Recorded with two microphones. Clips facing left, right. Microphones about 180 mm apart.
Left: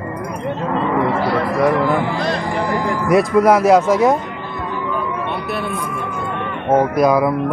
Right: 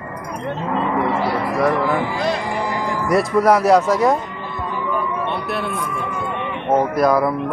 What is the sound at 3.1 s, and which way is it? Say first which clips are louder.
Speech: left 3 dB; centre (ahead or behind).